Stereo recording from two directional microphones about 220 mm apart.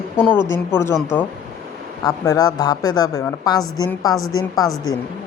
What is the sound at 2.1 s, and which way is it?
Speech, 15° left (ahead or behind).